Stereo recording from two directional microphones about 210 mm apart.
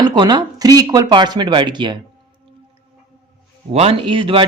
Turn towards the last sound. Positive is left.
turn(degrees=-25)  # may be behind; listen again after turning